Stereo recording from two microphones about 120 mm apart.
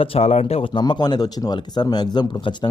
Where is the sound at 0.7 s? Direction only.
40° left (ahead or behind).